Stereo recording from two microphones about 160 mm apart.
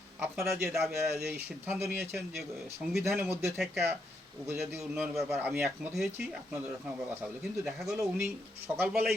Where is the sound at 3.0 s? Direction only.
15° right (ahead or behind).